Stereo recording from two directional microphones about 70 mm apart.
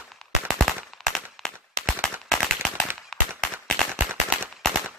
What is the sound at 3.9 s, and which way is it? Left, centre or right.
Gunshot, right.